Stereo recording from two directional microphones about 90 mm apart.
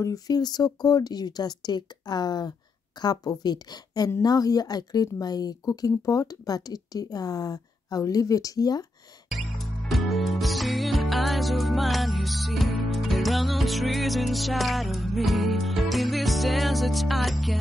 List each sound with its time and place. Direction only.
0.0 s speech: 45° left (ahead or behind)
9.3 s music: centre (ahead or behind)